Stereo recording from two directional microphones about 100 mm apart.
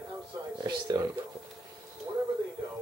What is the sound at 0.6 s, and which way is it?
Speech, 45° right (ahead or behind).